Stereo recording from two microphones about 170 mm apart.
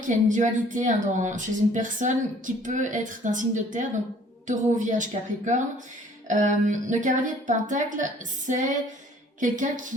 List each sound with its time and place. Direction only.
0.0 s a woman's voice: 45° right (ahead or behind)